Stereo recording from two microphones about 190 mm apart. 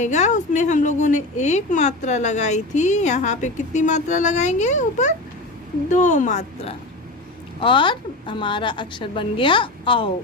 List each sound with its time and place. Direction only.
0.0 s a woman's voice: 40° left (ahead or behind)